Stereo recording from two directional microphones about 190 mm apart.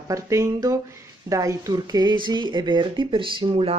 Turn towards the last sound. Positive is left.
turn(degrees=-25)  # may be behind; listen again after turning